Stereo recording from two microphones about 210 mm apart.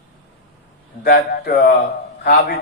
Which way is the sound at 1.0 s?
45° left (ahead or behind).